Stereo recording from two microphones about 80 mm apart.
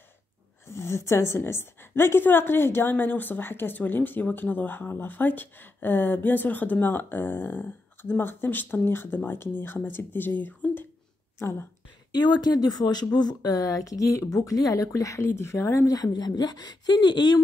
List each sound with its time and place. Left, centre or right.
0.7 s a woman's voice: left
12.1 s speech: left
16.0 s speech: left